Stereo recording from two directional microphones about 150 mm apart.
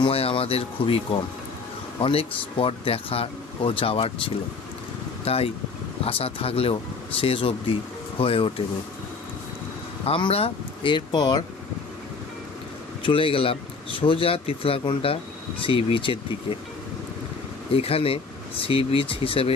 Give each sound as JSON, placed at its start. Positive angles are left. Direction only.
{"t": 0.0, "sound": "speech", "side_deg": 40}
{"t": 2.0, "sound": "speech", "side_deg": 40}
{"t": 10.0, "sound": "speech", "side_deg": 40}
{"t": 13.0, "sound": "speech", "side_deg": 35}
{"t": 17.7, "sound": "speech", "side_deg": 40}